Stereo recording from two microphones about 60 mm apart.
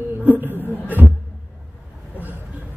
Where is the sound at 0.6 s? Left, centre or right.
Left.